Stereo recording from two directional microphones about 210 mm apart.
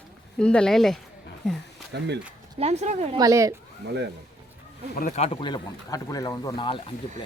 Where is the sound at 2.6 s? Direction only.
30° right (ahead or behind).